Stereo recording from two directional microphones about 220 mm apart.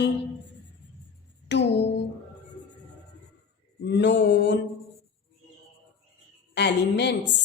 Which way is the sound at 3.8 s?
55° left (ahead or behind).